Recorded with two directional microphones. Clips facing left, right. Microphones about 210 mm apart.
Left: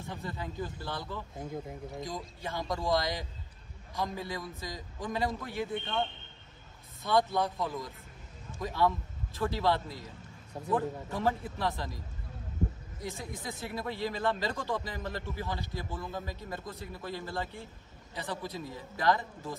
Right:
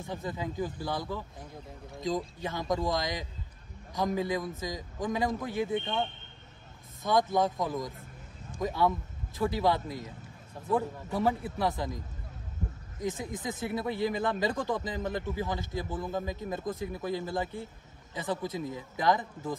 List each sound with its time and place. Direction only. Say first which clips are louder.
0.1 s speech: right 5 dB; 15° right (ahead or behind)
2.7 s speech: even; 20° right (ahead or behind)
13.0 s speech: right 6 dB; 20° right (ahead or behind)